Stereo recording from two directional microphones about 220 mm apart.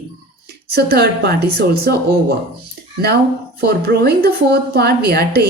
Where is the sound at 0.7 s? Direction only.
45° right (ahead or behind).